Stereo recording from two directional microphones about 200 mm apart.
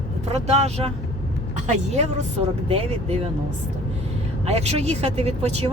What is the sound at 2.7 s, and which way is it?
Speech, 30° right (ahead or behind).